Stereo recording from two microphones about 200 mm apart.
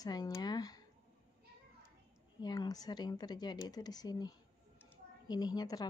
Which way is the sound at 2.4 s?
20° left (ahead or behind).